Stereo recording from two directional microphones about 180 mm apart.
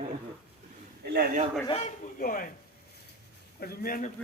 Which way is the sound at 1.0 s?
60° right (ahead or behind).